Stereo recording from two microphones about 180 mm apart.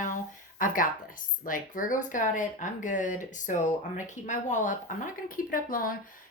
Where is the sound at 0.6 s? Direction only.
50° left (ahead or behind).